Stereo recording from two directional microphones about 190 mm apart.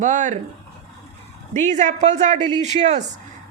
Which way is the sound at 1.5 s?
40° right (ahead or behind).